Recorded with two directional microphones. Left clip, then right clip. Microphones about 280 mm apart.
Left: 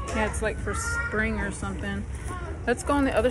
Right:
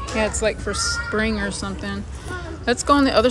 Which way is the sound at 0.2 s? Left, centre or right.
Centre.